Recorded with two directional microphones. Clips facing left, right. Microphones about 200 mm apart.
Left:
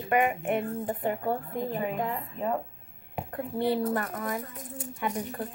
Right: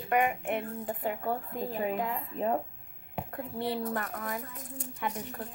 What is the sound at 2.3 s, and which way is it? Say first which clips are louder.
Speech: right 1 dB; 40° right (ahead or behind).